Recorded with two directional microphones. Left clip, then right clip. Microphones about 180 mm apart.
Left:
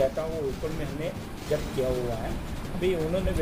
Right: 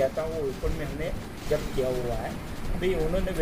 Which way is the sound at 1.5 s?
Centre (ahead or behind).